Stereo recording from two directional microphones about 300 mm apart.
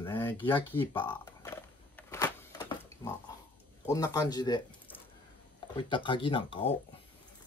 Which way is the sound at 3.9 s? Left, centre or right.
Centre.